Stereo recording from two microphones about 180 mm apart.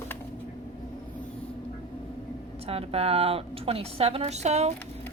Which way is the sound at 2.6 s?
35° right (ahead or behind).